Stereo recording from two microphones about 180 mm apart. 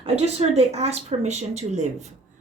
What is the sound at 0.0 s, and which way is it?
A woman's voice, 35° right (ahead or behind).